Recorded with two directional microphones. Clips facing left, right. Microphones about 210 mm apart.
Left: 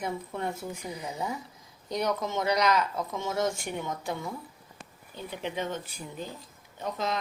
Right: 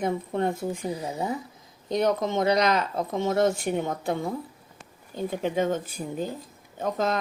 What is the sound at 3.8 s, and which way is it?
Speech, 55° right (ahead or behind).